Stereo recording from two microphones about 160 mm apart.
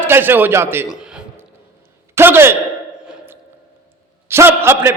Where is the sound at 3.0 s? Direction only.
5° right (ahead or behind).